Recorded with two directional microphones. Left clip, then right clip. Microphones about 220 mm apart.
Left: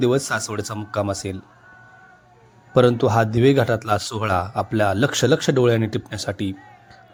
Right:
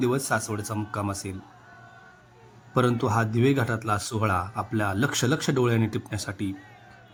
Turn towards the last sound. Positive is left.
turn(degrees=20)  # may be behind; listen again after turning